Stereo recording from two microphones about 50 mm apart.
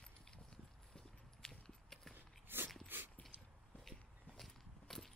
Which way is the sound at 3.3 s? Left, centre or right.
Right.